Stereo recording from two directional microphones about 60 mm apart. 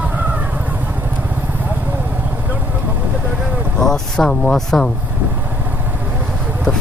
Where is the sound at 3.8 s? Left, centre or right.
Centre.